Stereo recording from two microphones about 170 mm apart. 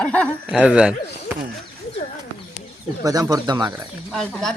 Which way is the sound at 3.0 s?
20° right (ahead or behind).